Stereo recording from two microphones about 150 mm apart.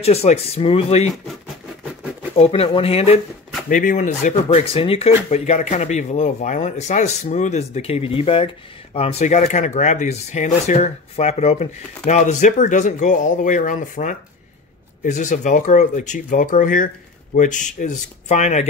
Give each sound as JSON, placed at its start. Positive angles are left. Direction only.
{"t": 0.0, "sound": "speech", "side_deg": 45}
{"t": 2.3, "sound": "speech", "side_deg": 40}
{"t": 3.6, "sound": "speech", "side_deg": 60}